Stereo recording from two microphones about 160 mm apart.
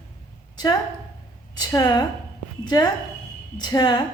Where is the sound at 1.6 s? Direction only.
25° left (ahead or behind).